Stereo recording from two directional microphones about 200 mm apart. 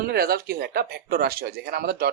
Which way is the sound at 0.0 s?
50° right (ahead or behind).